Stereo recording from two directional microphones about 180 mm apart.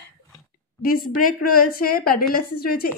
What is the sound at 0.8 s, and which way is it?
A woman's voice, 50° left (ahead or behind).